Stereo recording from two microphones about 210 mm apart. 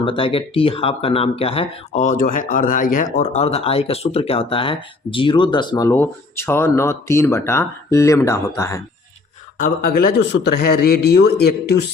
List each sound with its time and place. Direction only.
0.0 s speech: 25° left (ahead or behind)
9.6 s a man's voice: 45° left (ahead or behind)